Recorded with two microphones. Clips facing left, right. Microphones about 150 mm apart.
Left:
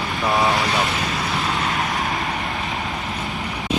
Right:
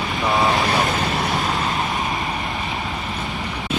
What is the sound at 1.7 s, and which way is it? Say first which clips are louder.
Vehicle: even; 20° right (ahead or behind).